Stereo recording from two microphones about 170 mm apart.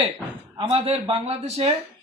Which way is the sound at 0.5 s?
30° right (ahead or behind).